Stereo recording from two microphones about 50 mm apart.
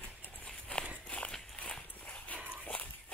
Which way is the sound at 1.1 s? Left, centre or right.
Left.